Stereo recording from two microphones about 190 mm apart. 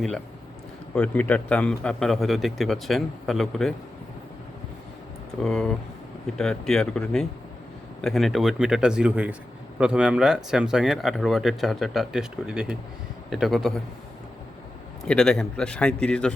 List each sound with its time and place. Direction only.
0.9 s speech: 5° left (ahead or behind)
5.4 s speech: centre (ahead or behind)
15.0 s speech: 5° left (ahead or behind)